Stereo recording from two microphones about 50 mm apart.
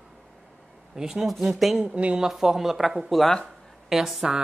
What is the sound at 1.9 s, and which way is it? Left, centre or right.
Speech, right.